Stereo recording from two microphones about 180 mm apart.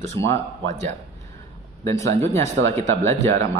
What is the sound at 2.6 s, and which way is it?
Speech, 90° right.